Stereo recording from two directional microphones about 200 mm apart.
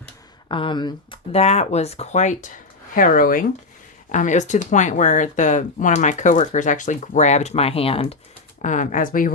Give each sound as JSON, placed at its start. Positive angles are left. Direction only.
{"t": 0.4, "sound": "speech", "side_deg": 25}
{"t": 8.6, "sound": "speech", "side_deg": 40}